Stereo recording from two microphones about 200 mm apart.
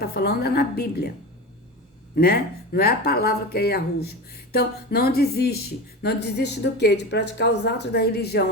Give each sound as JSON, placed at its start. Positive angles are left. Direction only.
{"t": 0.0, "sound": "speech", "side_deg": 50}
{"t": 2.1, "sound": "speech", "side_deg": 50}